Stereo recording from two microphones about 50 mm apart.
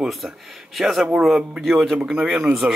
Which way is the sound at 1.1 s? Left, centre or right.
Centre.